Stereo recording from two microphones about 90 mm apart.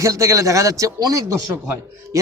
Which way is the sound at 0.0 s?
35° right (ahead or behind).